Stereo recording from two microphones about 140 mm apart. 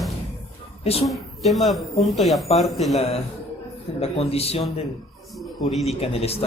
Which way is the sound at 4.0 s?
45° left (ahead or behind).